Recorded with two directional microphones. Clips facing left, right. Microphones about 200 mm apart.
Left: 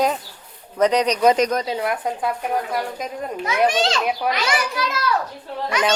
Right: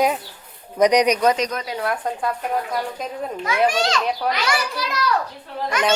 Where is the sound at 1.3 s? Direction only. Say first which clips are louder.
Left 5 dB; 45° left (ahead or behind).